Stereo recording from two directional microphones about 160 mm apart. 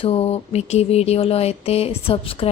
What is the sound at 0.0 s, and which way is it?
Speech, 40° left (ahead or behind).